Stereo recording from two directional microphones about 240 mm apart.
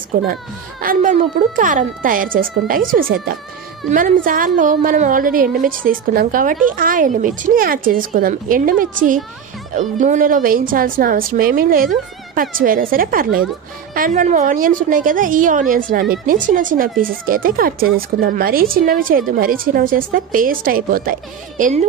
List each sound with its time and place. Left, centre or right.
0.2 s speech: right